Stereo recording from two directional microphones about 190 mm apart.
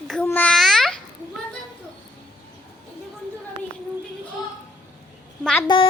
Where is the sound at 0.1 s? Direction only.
10° left (ahead or behind).